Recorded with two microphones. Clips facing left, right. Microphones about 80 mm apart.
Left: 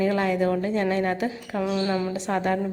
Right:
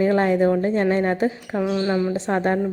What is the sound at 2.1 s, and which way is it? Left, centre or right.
Speech, right.